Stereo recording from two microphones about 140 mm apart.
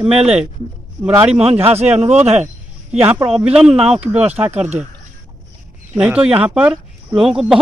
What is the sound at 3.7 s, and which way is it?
Speech, 45° right (ahead or behind).